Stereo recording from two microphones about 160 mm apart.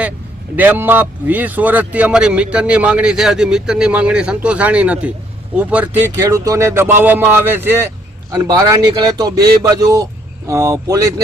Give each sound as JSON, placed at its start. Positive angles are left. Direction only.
{"t": 0.5, "sound": "speech", "side_deg": -10}
{"t": 6.2, "sound": "speech", "side_deg": -20}
{"t": 8.4, "sound": "speech", "side_deg": -25}